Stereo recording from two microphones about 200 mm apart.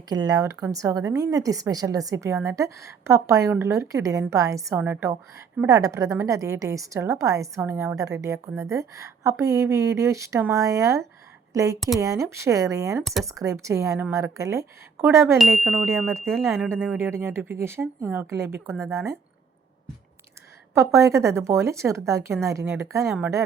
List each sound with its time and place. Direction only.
0.1 s a woman's voice: 20° right (ahead or behind)
15.4 s speech: centre (ahead or behind)
16.4 s a woman's voice: 15° right (ahead or behind)
20.7 s a woman's voice: 15° right (ahead or behind)